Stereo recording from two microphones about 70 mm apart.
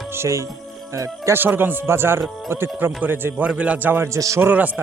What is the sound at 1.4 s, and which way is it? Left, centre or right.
A man's voice, right.